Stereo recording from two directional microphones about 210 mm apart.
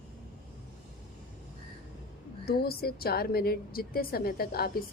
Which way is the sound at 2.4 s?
45° left (ahead or behind).